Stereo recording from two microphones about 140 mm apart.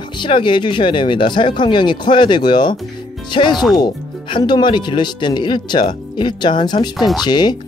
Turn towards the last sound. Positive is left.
turn(degrees=30)  # may be behind; listen again after turning